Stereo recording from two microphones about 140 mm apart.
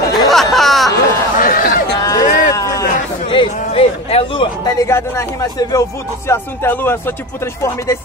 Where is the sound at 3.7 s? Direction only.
40° left (ahead or behind).